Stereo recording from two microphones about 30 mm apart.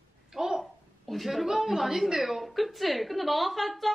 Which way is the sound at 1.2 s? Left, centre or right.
Centre.